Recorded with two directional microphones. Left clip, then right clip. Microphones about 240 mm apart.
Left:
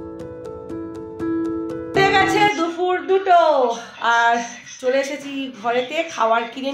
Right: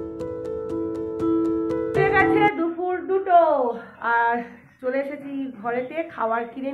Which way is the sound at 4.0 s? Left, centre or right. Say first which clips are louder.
Left 5 dB; centre.